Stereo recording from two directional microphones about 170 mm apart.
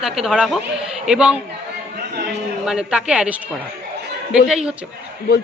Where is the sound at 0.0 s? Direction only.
5° right (ahead or behind).